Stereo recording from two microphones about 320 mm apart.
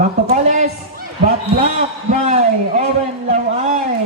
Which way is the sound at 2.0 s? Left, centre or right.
Right.